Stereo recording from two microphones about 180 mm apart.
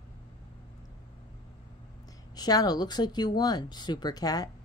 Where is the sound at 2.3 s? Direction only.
20° left (ahead or behind).